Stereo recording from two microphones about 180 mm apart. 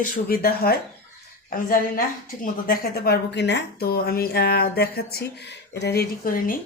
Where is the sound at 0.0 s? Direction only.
55° left (ahead or behind).